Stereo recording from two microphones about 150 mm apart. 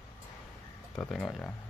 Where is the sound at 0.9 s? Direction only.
5° left (ahead or behind).